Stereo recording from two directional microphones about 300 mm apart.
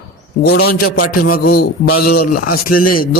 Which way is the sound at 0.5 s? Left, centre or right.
Left.